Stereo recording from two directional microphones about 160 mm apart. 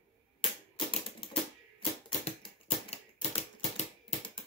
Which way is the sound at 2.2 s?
40° left (ahead or behind).